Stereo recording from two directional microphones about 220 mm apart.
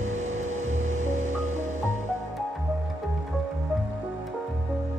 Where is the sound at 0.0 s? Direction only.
35° right (ahead or behind).